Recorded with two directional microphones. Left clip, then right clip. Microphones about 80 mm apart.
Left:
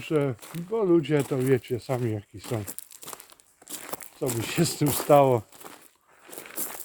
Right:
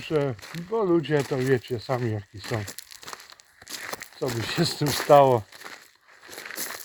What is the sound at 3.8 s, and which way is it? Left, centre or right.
Crumpling, right.